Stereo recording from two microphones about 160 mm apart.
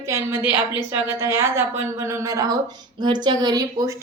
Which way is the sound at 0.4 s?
25° left (ahead or behind).